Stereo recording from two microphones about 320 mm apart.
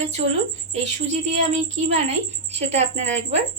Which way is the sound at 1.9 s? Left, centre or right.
Centre.